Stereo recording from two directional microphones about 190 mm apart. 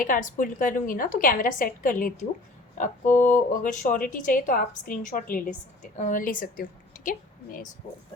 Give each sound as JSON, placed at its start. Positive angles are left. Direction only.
{"t": 0.0, "sound": "a woman's voice", "side_deg": 45}
{"t": 3.1, "sound": "speech", "side_deg": 10}
{"t": 3.3, "sound": "a woman's voice", "side_deg": 45}